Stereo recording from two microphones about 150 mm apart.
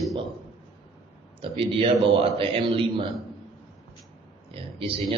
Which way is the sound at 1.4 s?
40° right (ahead or behind).